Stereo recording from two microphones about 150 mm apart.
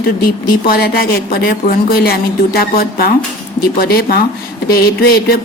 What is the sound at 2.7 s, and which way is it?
Speech, 90° left.